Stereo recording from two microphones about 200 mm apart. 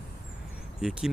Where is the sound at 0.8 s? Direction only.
5° right (ahead or behind).